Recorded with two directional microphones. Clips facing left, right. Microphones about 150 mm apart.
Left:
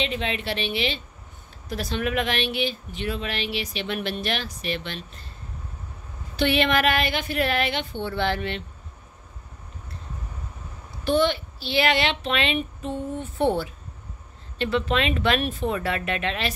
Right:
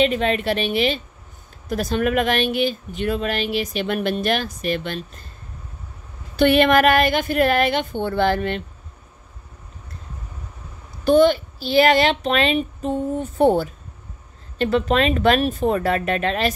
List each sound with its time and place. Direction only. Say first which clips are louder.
0.0 s speech: right 9 dB; 50° right (ahead or behind)
6.3 s speech: right 7 dB; 50° right (ahead or behind)
11.1 s a child's voice: right 7 dB; 40° right (ahead or behind)